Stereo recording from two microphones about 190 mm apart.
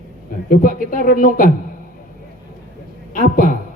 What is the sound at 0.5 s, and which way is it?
Speech, 45° left (ahead or behind).